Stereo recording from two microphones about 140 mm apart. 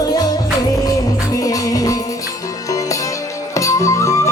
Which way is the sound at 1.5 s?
25° left (ahead or behind).